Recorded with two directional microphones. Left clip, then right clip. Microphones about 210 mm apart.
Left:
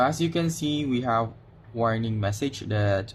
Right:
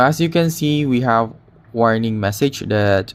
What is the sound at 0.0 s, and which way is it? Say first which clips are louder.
Speech: right 9 dB; 30° right (ahead or behind).